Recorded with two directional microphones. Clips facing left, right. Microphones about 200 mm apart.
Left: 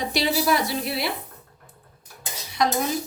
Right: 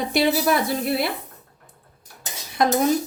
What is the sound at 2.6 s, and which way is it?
Speech, 50° right (ahead or behind).